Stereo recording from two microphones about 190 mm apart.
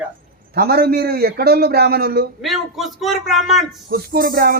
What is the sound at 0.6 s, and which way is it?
A man's voice, 55° right (ahead or behind).